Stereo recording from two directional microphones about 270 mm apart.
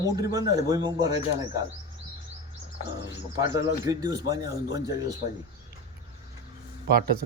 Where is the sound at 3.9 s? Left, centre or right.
Centre.